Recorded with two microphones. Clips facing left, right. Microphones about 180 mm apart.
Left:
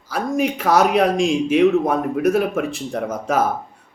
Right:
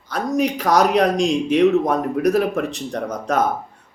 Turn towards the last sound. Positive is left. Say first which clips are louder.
# even
turn(degrees=5)  # may be behind; listen again after turning